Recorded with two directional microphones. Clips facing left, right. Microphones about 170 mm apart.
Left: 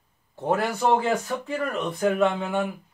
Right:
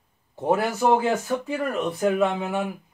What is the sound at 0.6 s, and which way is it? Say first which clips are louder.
Speech: right 1 dB; 5° right (ahead or behind).